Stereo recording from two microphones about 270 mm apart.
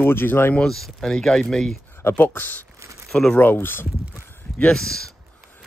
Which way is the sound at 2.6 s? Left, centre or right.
Centre.